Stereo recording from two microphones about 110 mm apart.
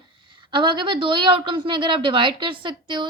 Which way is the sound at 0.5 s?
45° right (ahead or behind).